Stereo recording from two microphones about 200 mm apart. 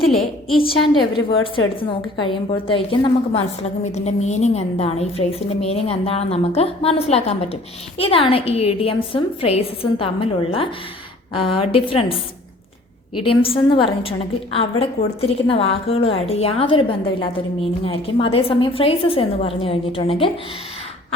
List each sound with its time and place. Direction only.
0.0 s a woman's voice: centre (ahead or behind)
1.5 s a woman's voice: 25° left (ahead or behind)
13.2 s a woman's voice: 25° left (ahead or behind)